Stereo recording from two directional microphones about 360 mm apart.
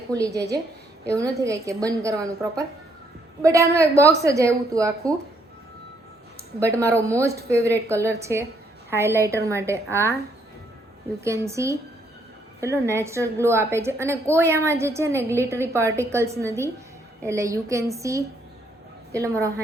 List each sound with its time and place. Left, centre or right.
1.0 s a woman's voice: centre
6.6 s a woman's voice: centre
11.2 s a woman's voice: centre
12.8 s a woman's voice: centre